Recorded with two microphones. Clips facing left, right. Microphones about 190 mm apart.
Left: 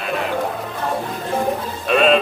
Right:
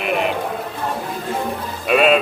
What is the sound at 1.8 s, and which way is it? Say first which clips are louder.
Speech: even; 5° right (ahead or behind).